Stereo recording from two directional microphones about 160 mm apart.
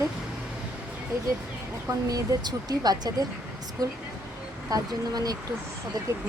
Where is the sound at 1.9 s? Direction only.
20° right (ahead or behind).